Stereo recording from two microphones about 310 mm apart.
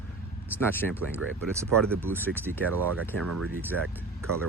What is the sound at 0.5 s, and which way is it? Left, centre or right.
Speech, centre.